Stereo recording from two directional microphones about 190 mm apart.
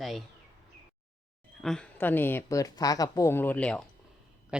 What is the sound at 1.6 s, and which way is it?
A woman's voice, 5° left (ahead or behind).